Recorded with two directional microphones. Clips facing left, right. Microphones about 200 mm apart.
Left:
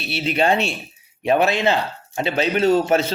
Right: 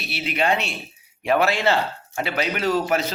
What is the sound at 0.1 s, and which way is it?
Speech, 30° left (ahead or behind).